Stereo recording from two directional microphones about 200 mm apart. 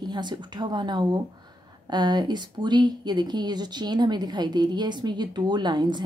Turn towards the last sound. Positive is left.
turn(degrees=-20)  # may be behind; listen again after turning